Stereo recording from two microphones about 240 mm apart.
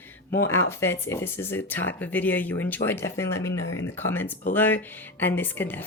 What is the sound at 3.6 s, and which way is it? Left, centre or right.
Speech, left.